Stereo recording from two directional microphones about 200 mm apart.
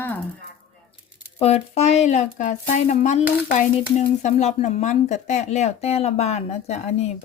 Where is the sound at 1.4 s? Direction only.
30° left (ahead or behind).